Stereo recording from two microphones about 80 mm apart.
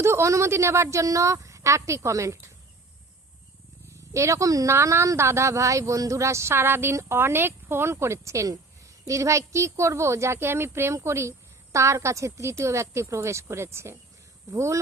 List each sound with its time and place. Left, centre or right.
0.0 s a woman's voice: right
3.8 s a woman's voice: right